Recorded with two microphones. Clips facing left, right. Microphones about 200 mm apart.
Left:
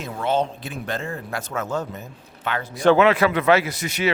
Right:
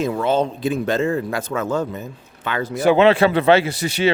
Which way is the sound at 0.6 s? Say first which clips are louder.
Right 10 dB; 90° right.